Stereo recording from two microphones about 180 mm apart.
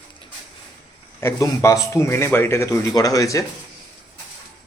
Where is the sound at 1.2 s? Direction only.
15° left (ahead or behind).